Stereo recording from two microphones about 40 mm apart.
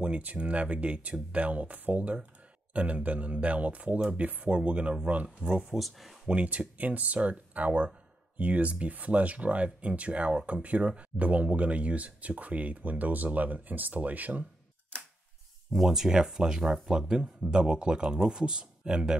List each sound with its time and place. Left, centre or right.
0.0 s speech: right
5.8 s speech: centre
6.2 s speech: right
15.7 s speech: centre